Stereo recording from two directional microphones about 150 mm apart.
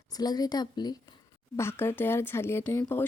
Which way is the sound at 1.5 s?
15° left (ahead or behind).